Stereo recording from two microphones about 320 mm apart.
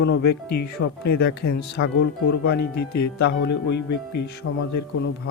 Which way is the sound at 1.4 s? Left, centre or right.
Left.